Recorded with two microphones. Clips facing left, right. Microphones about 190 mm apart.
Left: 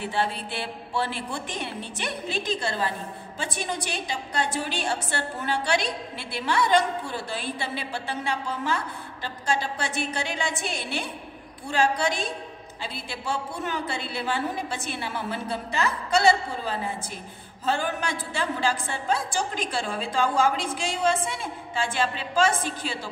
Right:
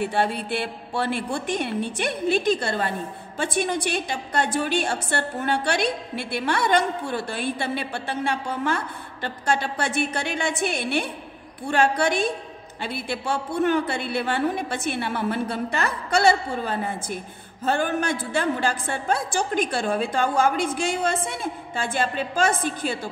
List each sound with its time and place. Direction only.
0.0 s a woman's voice: 55° right (ahead or behind)